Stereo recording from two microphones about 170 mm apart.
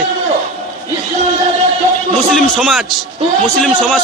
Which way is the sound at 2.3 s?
Centre (ahead or behind).